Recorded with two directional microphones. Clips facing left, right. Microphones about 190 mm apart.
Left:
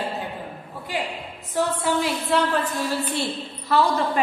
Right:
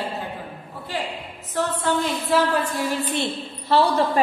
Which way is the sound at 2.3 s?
10° right (ahead or behind).